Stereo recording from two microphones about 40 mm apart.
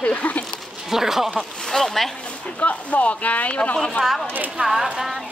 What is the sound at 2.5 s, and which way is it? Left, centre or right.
Speech, left.